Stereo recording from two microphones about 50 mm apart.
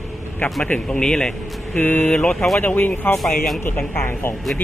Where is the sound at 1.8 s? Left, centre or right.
Left.